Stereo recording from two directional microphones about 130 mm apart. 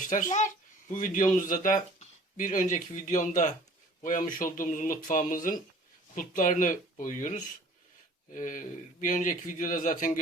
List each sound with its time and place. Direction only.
0.1 s speech: 75° left (ahead or behind)
0.9 s speech: 90° left; by 3.5 s 75° left (ahead or behind)
4.0 s speech: 90° left
7.0 s a man's voice: 70° left (ahead or behind); by 10.1 s 85° left